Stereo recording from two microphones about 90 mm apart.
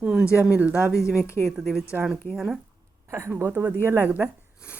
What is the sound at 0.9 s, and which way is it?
Speech, 30° left (ahead or behind).